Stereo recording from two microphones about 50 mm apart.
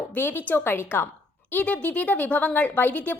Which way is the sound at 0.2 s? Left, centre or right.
Left.